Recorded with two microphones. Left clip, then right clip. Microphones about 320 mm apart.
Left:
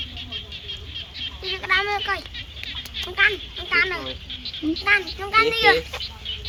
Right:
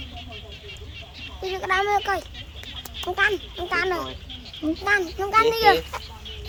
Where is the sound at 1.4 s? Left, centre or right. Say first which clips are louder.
Left 1 dB; right.